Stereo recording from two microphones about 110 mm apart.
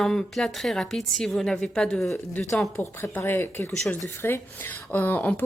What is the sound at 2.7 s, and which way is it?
A woman's voice, 25° left (ahead or behind).